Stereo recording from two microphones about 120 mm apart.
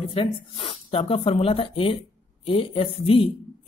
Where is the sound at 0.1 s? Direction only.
50° left (ahead or behind).